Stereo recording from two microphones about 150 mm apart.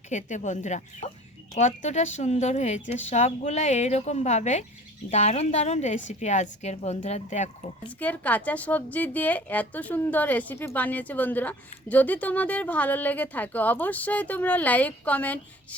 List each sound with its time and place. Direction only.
0.1 s a woman's voice: 55° left (ahead or behind)
7.9 s a woman's voice: 10° left (ahead or behind)